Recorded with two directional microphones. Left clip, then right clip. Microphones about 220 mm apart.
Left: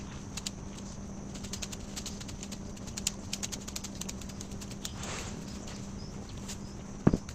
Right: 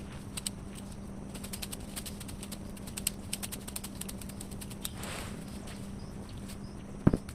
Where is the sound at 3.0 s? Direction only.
20° right (ahead or behind).